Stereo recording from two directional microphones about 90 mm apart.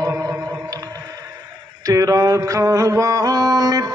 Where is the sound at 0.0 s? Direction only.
35° right (ahead or behind).